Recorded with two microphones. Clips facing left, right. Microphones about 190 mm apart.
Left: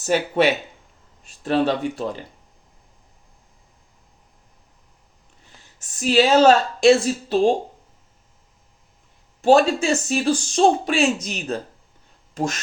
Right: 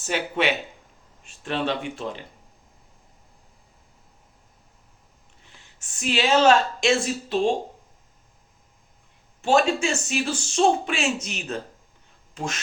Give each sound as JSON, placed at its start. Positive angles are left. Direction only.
{"t": 0.0, "sound": "speech", "side_deg": 40}
{"t": 5.8, "sound": "speech", "side_deg": 40}
{"t": 9.4, "sound": "speech", "side_deg": 35}